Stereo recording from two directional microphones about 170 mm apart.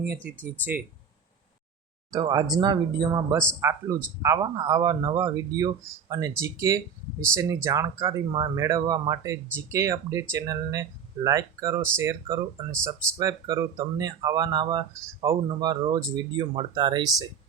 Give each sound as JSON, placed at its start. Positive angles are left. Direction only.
{"t": 2.0, "sound": "speech", "side_deg": -25}